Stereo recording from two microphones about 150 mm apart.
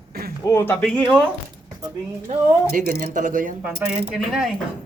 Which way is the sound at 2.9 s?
60° right (ahead or behind).